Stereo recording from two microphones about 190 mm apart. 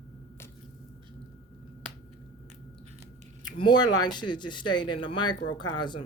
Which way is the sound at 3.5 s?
25° left (ahead or behind).